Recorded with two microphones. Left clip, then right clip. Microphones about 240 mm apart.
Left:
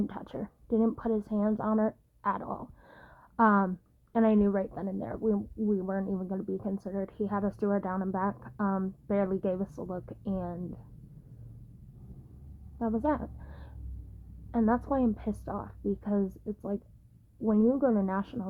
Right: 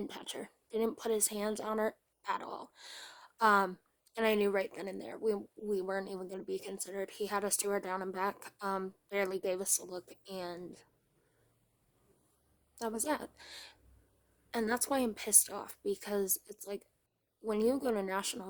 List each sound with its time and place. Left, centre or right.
0.1 s a woman's voice: right
12.8 s a woman's voice: right